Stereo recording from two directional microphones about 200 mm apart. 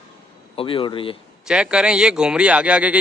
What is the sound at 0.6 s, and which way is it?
Speech, 25° left (ahead or behind).